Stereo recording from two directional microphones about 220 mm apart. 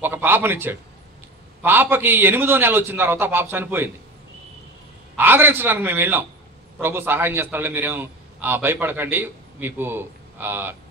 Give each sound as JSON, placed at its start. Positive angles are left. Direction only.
{"t": 0.0, "sound": "a man's voice", "side_deg": -10}
{"t": 5.1, "sound": "a man's voice", "side_deg": -10}